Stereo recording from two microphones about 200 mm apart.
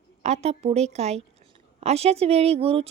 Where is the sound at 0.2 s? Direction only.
35° right (ahead or behind).